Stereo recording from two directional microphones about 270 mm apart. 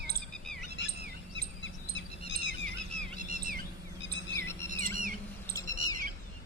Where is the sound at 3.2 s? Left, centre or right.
Right.